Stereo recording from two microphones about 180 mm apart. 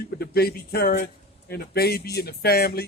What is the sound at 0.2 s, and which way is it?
Speech, 60° left (ahead or behind).